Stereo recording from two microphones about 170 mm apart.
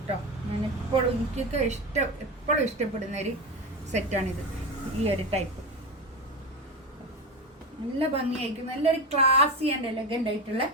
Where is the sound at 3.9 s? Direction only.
40° right (ahead or behind).